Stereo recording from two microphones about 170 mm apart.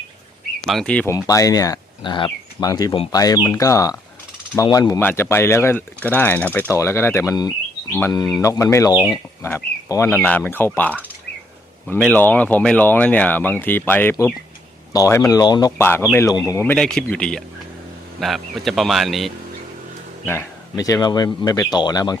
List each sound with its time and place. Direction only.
0.7 s a man's voice: 5° left (ahead or behind)
1.1 s speech: 20° left (ahead or behind)
15.8 s speech: 15° left (ahead or behind)
16.7 s a man's voice: 5° left (ahead or behind)
20.2 s speech: 15° left (ahead or behind)